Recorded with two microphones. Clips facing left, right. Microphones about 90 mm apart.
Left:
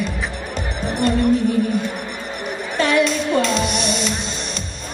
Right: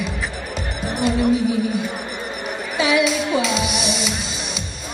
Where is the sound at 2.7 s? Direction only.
5° right (ahead or behind).